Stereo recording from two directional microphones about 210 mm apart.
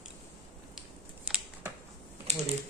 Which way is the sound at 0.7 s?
5° right (ahead or behind).